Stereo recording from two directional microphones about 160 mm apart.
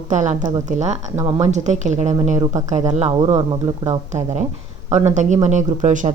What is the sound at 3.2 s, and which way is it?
Speech, 40° right (ahead or behind).